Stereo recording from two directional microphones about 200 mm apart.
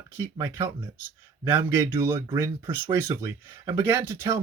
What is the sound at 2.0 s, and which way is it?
Speech, 10° right (ahead or behind).